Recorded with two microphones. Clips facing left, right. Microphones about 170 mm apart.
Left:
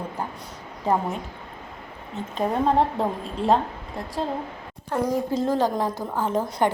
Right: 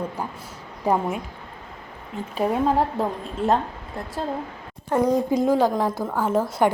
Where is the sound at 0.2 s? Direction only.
10° right (ahead or behind).